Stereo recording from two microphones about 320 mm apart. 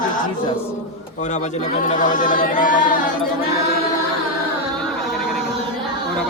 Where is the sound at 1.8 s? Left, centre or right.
Left.